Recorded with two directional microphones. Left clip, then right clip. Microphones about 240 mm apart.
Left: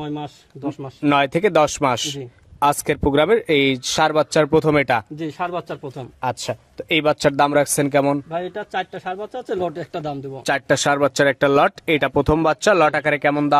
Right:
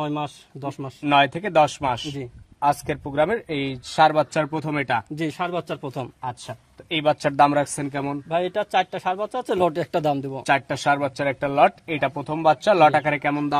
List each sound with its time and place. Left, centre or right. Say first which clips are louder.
0.0 s speech: right 2 dB; right
1.0 s speech: left 2 dB; centre
5.1 s speech: left 1 dB; right
6.2 s speech: left 8 dB; left
8.3 s speech: right 3 dB; right
10.4 s speech: left 4 dB; centre